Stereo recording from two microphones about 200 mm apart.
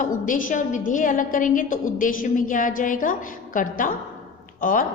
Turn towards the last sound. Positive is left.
turn(degrees=45)  # may be behind; listen again after turning